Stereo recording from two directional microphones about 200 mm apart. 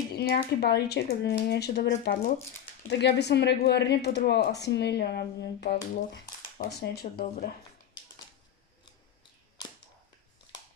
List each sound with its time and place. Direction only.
0.1 s speech: 50° left (ahead or behind)